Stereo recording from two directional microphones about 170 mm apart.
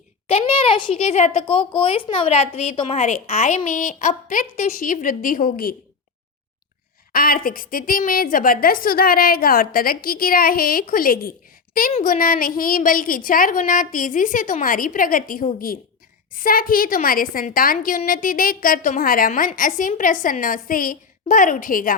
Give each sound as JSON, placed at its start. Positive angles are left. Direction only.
{"t": 0.3, "sound": "a child's voice", "side_deg": 35}
{"t": 7.1, "sound": "a woman's voice", "side_deg": 60}